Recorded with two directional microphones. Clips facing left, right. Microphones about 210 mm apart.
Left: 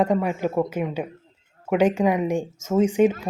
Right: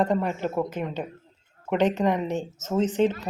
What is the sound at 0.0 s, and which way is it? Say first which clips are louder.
Speech: left 3 dB; 10° left (ahead or behind).